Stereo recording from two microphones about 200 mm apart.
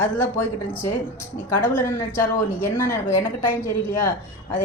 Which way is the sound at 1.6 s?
10° left (ahead or behind).